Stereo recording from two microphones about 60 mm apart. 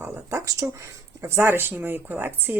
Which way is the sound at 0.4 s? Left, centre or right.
Right.